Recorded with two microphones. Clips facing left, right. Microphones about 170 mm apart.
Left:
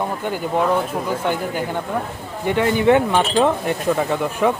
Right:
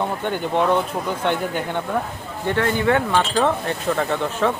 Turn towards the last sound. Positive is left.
turn(degrees=10)  # may be behind; listen again after turning